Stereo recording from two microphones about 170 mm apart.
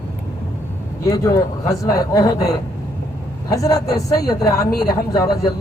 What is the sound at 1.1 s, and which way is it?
A man's voice, 20° left (ahead or behind).